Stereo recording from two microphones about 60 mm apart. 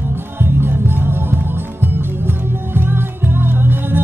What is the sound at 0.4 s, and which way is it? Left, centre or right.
Music, right.